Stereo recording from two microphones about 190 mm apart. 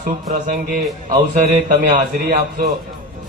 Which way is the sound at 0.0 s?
45° right (ahead or behind).